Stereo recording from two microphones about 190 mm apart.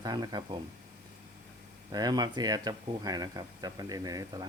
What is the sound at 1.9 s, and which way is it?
Speech, 20° right (ahead or behind).